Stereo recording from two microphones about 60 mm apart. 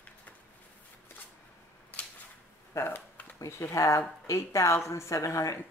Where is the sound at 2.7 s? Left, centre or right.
Left.